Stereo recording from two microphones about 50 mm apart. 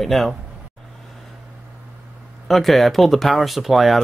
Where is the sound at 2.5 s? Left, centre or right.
Centre.